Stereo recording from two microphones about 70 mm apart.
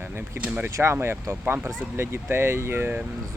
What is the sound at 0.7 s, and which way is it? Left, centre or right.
Speech, right.